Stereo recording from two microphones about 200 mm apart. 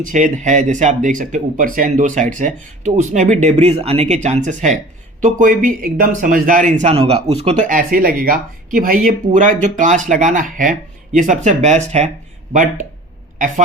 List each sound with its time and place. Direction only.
0.0 s a man's voice: 40° right (ahead or behind)